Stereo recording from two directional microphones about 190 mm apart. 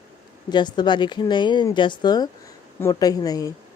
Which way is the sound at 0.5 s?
25° left (ahead or behind).